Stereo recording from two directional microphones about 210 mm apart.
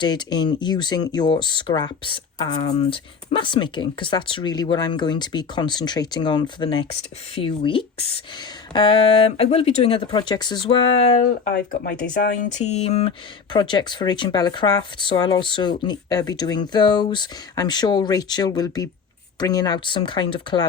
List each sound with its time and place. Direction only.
0.0 s speech: 20° left (ahead or behind)
10.9 s speech: 35° left (ahead or behind)
11.5 s speech: 45° left (ahead or behind); by 20.7 s 25° left (ahead or behind)